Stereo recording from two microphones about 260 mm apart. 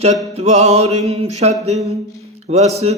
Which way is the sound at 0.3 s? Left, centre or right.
Right.